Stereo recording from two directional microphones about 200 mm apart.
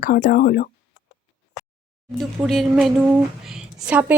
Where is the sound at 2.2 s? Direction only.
Centre (ahead or behind).